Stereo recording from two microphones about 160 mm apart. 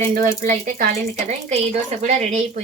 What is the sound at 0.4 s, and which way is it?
Speech, 60° right (ahead or behind).